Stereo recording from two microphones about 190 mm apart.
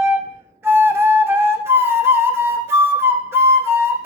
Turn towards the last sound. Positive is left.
turn(degrees=-10)  # may be behind; listen again after turning